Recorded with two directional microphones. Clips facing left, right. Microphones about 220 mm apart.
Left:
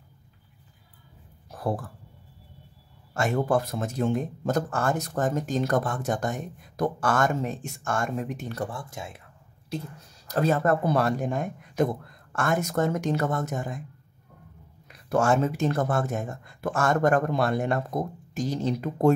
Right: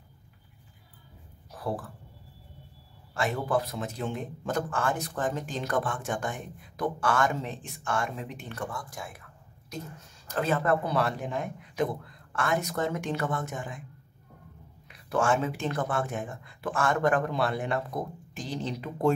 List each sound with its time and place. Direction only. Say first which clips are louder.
1.5 s speech: left 4 dB; 45° left (ahead or behind)
3.2 s a man's voice: left 4 dB; 45° left (ahead or behind); by 9.8 s 25° left (ahead or behind)
10.2 s a man's voice: left 4 dB; 40° left (ahead or behind)
14.9 s a man's voice: left 3 dB; 40° left (ahead or behind)